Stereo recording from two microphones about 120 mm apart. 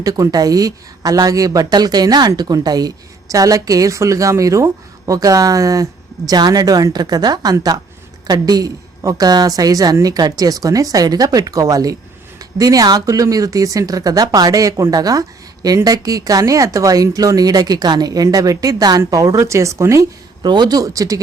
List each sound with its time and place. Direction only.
0.0 s a woman's voice: 30° right (ahead or behind)
20.4 s a woman's voice: 35° right (ahead or behind)